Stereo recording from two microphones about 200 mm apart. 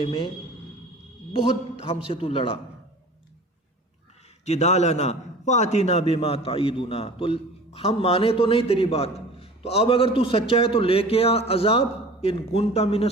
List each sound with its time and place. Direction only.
0.0 s a man's voice: 25° left (ahead or behind)
1.3 s a man's voice: 30° left (ahead or behind)
4.4 s a man's voice: 35° left (ahead or behind)